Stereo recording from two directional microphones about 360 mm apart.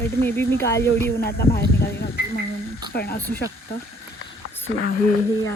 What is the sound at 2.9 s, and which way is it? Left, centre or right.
Speech, left.